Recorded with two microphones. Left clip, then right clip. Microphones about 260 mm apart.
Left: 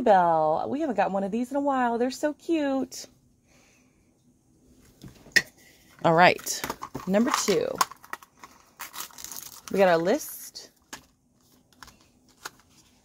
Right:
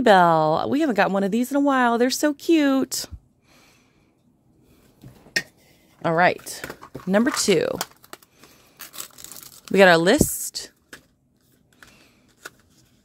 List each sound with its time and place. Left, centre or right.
0.0 s speech: right
6.0 s speech: centre
7.1 s speech: centre
8.7 s a sound: centre
9.7 s speech: right
10.5 s whispering: right